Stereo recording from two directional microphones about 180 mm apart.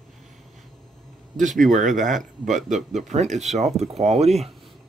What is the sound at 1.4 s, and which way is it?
Speech, 45° right (ahead or behind).